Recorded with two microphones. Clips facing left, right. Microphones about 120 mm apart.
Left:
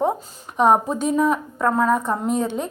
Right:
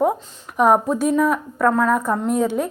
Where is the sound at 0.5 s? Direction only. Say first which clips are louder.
Right 1 dB; 30° left (ahead or behind).